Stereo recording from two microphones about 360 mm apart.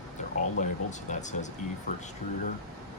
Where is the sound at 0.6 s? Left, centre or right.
Left.